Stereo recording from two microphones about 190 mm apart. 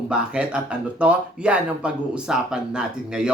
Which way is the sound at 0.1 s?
5° right (ahead or behind).